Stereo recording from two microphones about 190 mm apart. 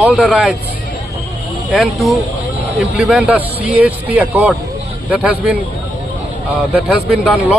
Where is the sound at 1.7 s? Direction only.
Centre (ahead or behind).